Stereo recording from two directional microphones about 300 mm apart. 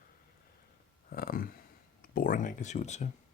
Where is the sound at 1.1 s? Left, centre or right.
Left.